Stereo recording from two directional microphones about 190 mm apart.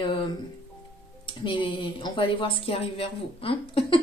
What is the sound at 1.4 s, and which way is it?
Speech, 25° left (ahead or behind).